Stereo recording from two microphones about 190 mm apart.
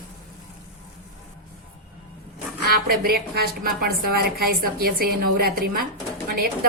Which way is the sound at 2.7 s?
55° right (ahead or behind).